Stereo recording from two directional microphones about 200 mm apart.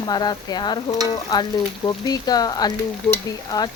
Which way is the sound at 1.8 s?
20° left (ahead or behind).